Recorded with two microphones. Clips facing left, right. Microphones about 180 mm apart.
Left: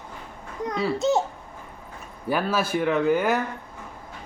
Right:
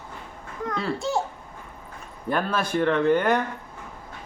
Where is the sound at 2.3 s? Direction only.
5° left (ahead or behind).